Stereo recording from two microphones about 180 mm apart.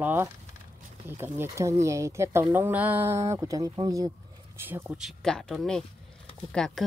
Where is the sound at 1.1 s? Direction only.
15° right (ahead or behind).